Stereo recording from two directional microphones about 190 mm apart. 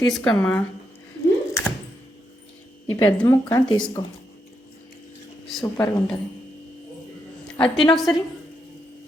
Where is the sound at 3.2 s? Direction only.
15° left (ahead or behind).